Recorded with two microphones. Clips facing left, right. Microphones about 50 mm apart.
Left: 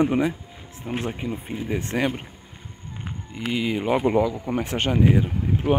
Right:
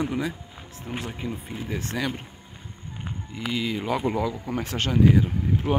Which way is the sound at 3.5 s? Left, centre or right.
Left.